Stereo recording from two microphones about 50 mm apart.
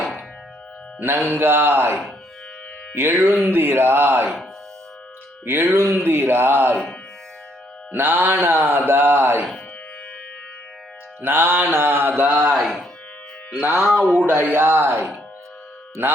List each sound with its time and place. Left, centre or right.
0.9 s mantra: right
1.3 s speech: right
5.5 s speech: right
7.9 s speech: right
11.2 s speech: right
12.5 s speech: centre
14.3 s speech: right